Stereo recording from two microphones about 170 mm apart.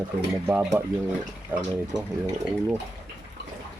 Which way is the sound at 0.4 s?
15° right (ahead or behind).